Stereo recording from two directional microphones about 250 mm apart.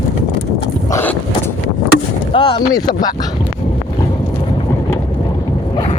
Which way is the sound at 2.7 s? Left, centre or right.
Centre.